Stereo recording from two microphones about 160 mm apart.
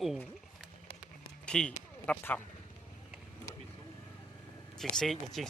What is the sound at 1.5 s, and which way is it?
Speech, 5° left (ahead or behind).